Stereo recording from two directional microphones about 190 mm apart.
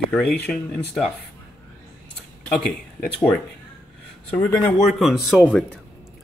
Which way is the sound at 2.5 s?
5° left (ahead or behind).